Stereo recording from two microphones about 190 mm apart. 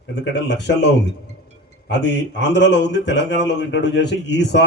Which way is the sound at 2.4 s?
70° left (ahead or behind).